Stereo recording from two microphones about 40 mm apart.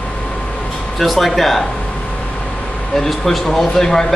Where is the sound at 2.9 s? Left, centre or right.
Centre.